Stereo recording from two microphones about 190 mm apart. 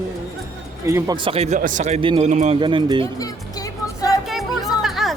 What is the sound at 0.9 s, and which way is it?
Speech, 15° right (ahead or behind).